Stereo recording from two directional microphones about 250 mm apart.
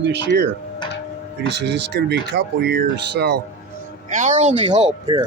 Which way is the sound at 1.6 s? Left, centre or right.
Right.